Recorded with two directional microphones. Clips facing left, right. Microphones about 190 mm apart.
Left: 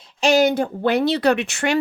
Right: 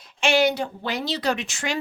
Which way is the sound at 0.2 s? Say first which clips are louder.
Left 4 dB; 40° left (ahead or behind).